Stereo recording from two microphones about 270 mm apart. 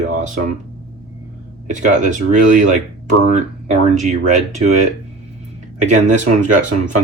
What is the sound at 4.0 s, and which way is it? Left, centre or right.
Speech, right.